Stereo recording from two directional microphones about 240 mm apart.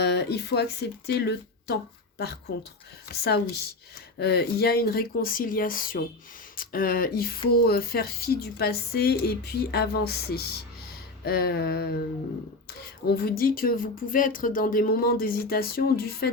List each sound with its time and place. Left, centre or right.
0.0 s speech: left
13.1 s speech: left